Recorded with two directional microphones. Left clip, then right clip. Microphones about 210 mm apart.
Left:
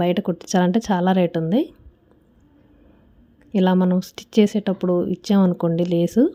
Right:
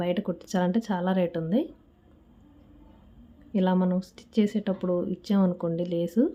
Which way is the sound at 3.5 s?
30° left (ahead or behind).